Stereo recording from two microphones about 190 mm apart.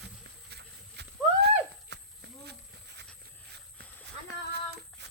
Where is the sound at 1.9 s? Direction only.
65° right (ahead or behind).